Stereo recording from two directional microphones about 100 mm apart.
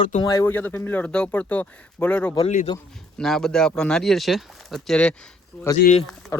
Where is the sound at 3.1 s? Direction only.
5° left (ahead or behind).